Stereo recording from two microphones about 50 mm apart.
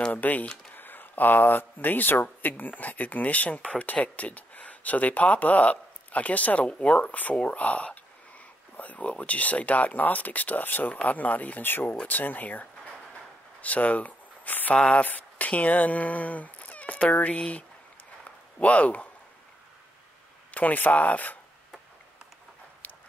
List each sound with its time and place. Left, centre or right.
0.1 s speech: left
20.5 s speech: left
22.8 s dog: left